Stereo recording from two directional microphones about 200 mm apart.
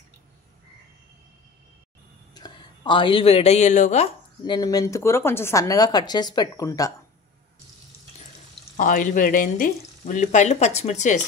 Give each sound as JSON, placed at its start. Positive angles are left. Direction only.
{"t": 2.3, "sound": "speech", "side_deg": 20}
{"t": 4.5, "sound": "speech", "side_deg": 20}
{"t": 8.7, "sound": "speech", "side_deg": 40}